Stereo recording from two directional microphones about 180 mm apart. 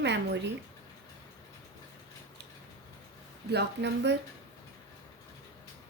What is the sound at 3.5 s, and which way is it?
Speech, 70° right (ahead or behind).